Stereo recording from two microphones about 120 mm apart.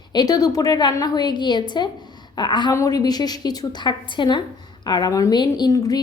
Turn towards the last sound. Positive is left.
turn(degrees=30)  # may be behind; listen again after turning